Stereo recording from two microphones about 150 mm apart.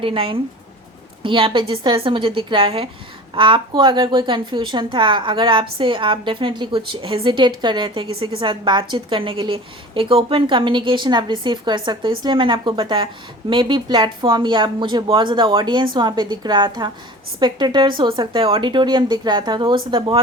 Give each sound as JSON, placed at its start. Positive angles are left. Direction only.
{"t": 0.0, "sound": "a woman's voice", "side_deg": -35}